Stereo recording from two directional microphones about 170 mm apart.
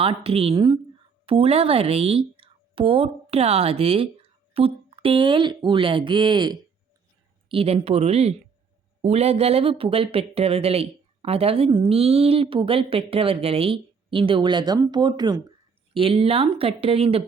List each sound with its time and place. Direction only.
0.0 s speech: 35° right (ahead or behind)